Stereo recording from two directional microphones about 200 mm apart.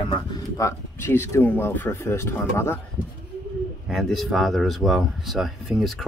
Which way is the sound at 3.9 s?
Centre (ahead or behind).